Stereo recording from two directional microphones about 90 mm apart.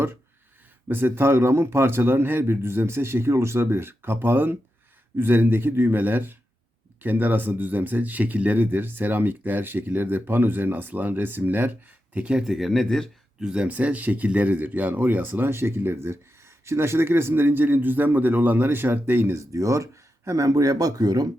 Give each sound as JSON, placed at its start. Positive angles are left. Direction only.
{"t": 0.9, "sound": "speech", "side_deg": -25}
{"t": 13.4, "sound": "speech", "side_deg": -10}